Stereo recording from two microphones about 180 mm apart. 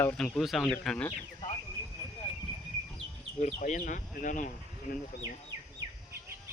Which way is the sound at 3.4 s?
40° left (ahead or behind).